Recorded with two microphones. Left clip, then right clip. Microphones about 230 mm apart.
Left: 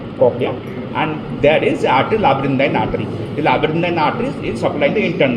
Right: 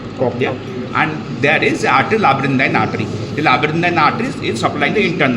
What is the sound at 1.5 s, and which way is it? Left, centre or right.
A man's voice, right.